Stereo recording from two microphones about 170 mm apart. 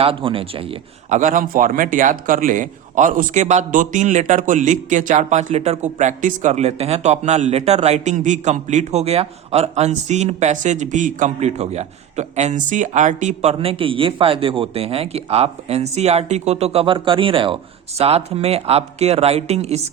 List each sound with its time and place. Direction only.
0.0 s speech: 30° right (ahead or behind)
1.1 s speech: 50° right (ahead or behind)